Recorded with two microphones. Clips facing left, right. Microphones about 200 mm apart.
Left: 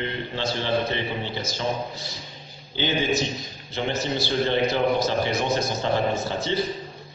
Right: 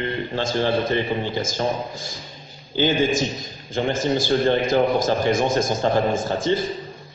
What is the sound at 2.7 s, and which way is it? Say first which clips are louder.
A man's voice: right 4 dB; 45° right (ahead or behind).